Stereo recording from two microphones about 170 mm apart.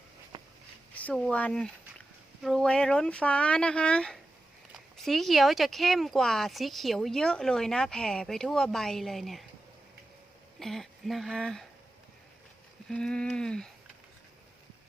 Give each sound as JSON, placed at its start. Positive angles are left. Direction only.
{"t": 0.3, "sound": "a sound", "side_deg": -30}
{"t": 0.9, "sound": "speech", "side_deg": 5}
{"t": 10.6, "sound": "speech", "side_deg": 0}
{"t": 12.9, "sound": "speech", "side_deg": 5}